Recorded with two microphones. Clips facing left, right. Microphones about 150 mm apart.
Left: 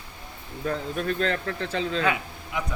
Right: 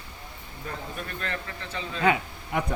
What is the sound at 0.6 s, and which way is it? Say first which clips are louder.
Speech: left 8 dB; 85° left.